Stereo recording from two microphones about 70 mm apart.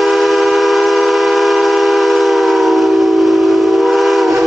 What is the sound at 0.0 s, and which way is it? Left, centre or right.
Train, centre.